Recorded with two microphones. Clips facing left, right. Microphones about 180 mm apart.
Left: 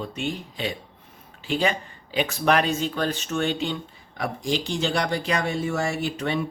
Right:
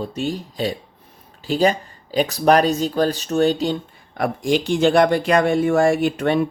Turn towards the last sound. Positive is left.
turn(degrees=-55)  # may be behind; listen again after turning